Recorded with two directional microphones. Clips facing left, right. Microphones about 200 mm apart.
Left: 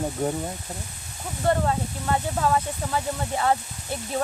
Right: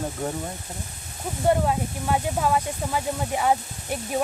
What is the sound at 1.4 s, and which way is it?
Speech, 10° right (ahead or behind).